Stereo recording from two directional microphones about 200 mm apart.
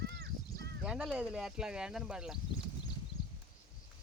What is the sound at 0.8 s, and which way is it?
Speech, 5° right (ahead or behind).